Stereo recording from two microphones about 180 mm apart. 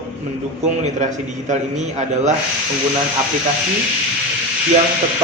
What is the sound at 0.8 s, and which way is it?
A man's voice, 40° right (ahead or behind).